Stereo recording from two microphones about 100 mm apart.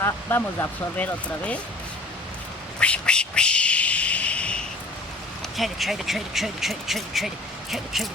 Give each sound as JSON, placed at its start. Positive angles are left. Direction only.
{"t": 0.0, "sound": "speech", "side_deg": 25}
{"t": 2.8, "sound": "a sound", "side_deg": 10}
{"t": 5.5, "sound": "speech", "side_deg": 0}